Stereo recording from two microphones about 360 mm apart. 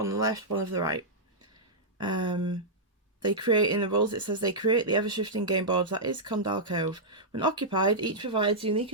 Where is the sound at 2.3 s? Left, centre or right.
Centre.